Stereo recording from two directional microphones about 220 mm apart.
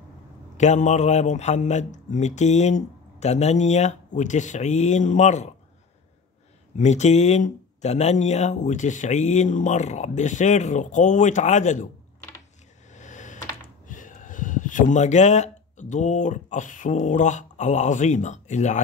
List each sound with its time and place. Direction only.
0.6 s speech: 30° left (ahead or behind)
6.8 s speech: 30° left (ahead or behind)
12.9 s a sound: 35° left (ahead or behind)
13.8 s speech: 35° left (ahead or behind)